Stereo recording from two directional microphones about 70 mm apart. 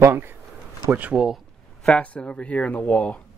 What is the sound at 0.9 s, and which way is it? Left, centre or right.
Speech, right.